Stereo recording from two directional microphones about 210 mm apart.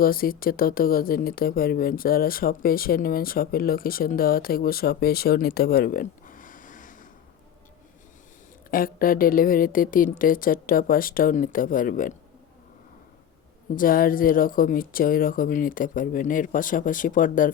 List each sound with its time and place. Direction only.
0.0 s speech: 45° left (ahead or behind)
8.7 s speech: 45° left (ahead or behind)
13.7 s speech: 45° left (ahead or behind)